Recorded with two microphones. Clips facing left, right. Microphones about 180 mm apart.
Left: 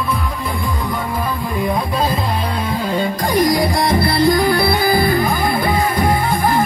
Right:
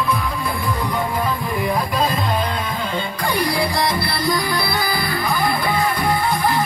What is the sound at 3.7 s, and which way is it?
Music, 50° left (ahead or behind).